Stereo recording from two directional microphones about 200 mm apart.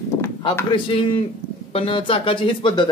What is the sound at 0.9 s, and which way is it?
Speech, 25° left (ahead or behind).